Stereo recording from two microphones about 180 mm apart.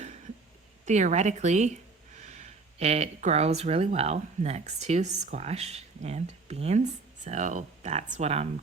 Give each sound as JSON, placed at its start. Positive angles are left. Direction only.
{"t": 0.9, "sound": "speech", "side_deg": -40}